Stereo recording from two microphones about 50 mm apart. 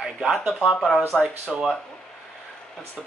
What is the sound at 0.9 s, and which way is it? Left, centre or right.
Speech, centre.